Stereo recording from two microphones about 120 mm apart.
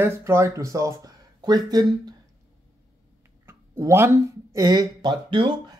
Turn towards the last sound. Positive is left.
turn(degrees=-40)  # may be behind; listen again after turning